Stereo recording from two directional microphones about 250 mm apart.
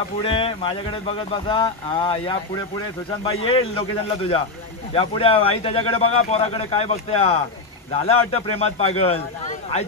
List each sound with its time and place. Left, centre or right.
0.2 s speech: left